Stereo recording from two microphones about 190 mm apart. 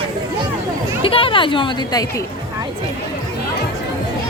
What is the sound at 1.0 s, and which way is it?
Speech, 30° left (ahead or behind).